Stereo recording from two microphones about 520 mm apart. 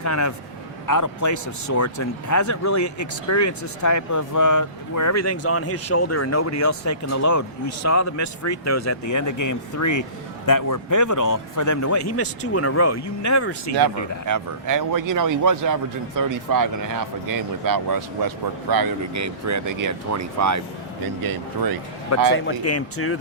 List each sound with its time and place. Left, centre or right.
0.0 s speech: left
14.3 s a man's voice: right
22.1 s speech: left